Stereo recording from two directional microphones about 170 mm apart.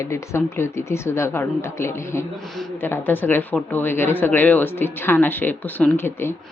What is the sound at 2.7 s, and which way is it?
Speech, 10° left (ahead or behind).